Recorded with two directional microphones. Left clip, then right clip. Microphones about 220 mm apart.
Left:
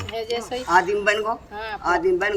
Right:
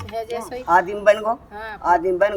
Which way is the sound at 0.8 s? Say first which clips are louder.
Right 4 dB; 15° right (ahead or behind).